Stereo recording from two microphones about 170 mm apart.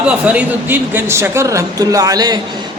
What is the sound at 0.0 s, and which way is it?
A man's voice, 5° right (ahead or behind).